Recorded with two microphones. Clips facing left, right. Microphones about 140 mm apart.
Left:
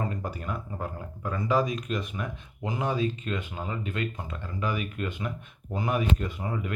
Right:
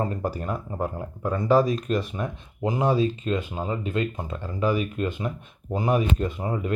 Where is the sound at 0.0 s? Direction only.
35° right (ahead or behind).